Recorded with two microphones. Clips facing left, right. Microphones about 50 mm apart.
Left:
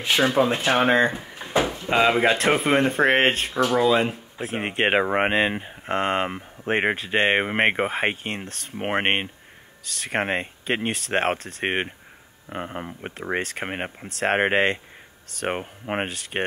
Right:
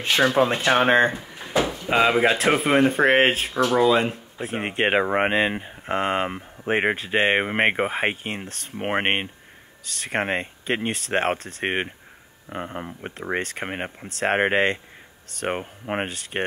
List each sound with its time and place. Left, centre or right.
0.4 s speech: right
1.1 s drawer open or close: centre
1.9 s speech: centre